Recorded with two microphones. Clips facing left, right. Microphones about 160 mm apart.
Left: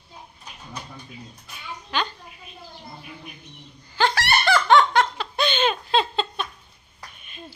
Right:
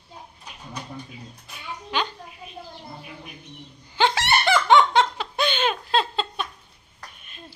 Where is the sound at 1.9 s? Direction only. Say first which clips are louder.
Even; 15° right (ahead or behind).